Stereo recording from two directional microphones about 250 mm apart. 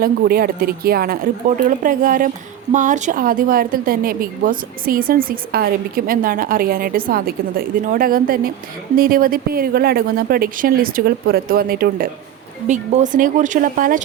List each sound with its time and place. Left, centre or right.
0.0 s a woman's voice: right